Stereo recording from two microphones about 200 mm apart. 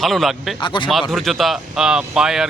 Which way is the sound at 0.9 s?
Centre (ahead or behind).